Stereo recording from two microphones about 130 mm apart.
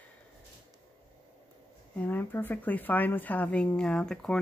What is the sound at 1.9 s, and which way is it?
Speech, 15° left (ahead or behind).